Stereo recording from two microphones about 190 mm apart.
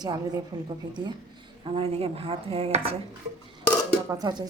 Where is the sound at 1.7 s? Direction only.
30° right (ahead or behind).